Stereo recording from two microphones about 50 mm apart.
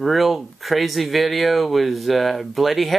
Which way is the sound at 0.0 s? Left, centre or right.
Centre.